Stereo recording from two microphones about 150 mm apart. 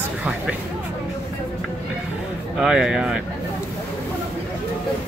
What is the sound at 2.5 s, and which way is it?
Speech, 5° right (ahead or behind).